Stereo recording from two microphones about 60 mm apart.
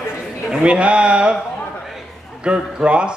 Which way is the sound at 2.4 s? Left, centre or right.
Centre.